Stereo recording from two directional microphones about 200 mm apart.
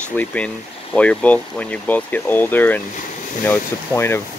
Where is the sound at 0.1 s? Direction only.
5° left (ahead or behind).